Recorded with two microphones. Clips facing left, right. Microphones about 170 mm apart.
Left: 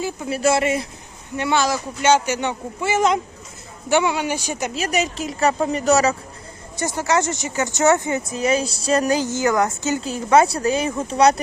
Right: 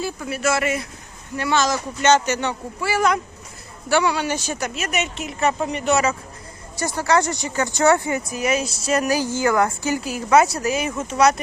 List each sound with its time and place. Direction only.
0.0 s speech: 25° left (ahead or behind)
1.4 s speech: 15° left (ahead or behind)
4.7 s speech: 30° left (ahead or behind)
6.7 s a woman's voice: 20° left (ahead or behind)